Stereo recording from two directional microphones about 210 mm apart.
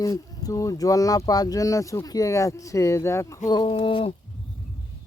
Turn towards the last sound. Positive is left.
turn(degrees=25)  # may be behind; listen again after turning